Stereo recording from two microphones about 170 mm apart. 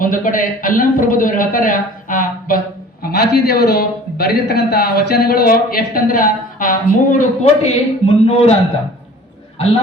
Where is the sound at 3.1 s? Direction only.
65° left (ahead or behind).